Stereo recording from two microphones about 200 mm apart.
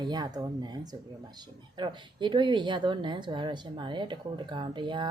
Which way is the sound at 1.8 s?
25° right (ahead or behind).